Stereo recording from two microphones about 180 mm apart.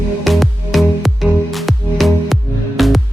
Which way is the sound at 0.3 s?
Centre (ahead or behind).